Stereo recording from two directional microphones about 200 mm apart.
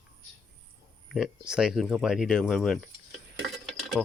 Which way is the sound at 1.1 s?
5° right (ahead or behind).